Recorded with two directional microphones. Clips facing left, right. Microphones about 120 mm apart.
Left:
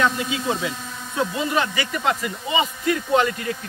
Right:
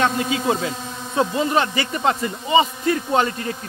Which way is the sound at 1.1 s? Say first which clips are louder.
Right 4 dB; 30° right (ahead or behind).